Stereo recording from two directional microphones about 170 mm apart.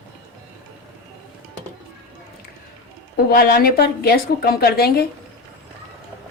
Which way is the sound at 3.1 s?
65° left (ahead or behind).